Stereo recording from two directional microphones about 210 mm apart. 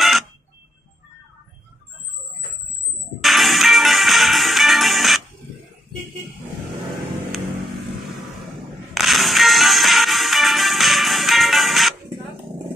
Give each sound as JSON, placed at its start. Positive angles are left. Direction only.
{"t": 3.2, "sound": "music", "side_deg": 0}
{"t": 8.9, "sound": "music", "side_deg": 0}